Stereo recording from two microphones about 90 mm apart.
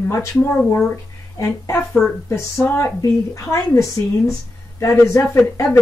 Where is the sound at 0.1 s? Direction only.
35° left (ahead or behind).